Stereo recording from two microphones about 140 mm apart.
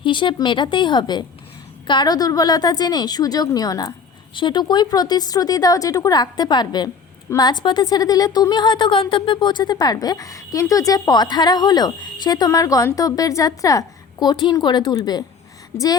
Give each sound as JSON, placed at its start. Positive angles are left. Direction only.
{"t": 0.0, "sound": "a woman's voice", "side_deg": 35}